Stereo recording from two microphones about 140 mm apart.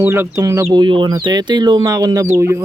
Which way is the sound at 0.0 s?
15° right (ahead or behind).